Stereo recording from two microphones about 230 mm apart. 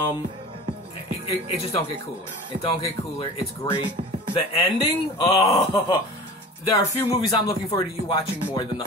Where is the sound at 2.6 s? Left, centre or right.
Left.